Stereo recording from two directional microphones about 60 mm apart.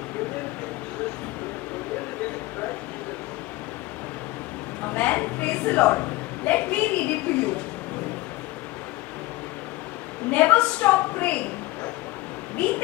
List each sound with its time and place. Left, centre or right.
4.8 s a woman's voice: left
10.3 s a woman's voice: left